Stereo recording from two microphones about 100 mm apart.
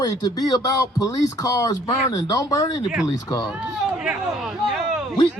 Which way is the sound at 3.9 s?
5° right (ahead or behind).